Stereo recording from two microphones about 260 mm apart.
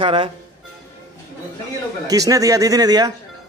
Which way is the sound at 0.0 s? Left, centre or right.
Centre.